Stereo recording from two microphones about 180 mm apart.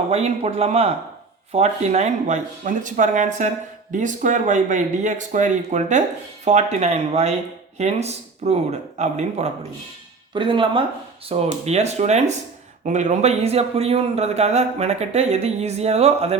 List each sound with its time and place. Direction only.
0.1 s speech: 35° right (ahead or behind)
10.3 s speech: 30° right (ahead or behind)